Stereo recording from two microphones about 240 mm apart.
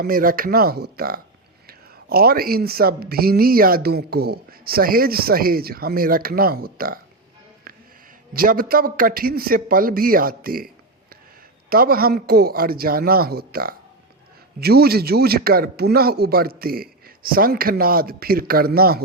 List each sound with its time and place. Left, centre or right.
0.0 s a man's voice: right
8.3 s a man's voice: right
11.7 s a man's voice: right